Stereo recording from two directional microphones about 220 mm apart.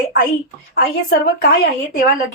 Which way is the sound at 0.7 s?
45° left (ahead or behind).